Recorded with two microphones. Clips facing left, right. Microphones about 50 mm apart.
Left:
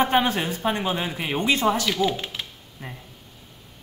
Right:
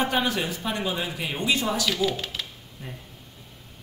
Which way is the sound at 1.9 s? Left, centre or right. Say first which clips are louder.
Left 2 dB; centre.